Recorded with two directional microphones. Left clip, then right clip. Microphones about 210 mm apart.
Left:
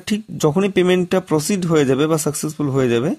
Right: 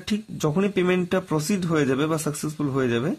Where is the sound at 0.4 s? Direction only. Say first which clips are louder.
Left 7 dB; 35° left (ahead or behind).